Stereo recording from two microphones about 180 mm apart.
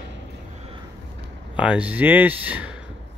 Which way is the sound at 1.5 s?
5° right (ahead or behind).